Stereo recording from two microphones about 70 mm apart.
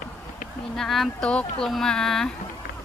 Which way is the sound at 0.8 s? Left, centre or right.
Centre.